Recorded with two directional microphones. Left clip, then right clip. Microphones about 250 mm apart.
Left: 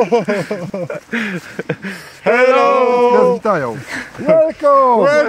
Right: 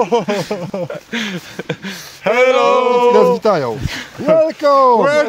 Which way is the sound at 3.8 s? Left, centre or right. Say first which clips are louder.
Left 1 dB; centre.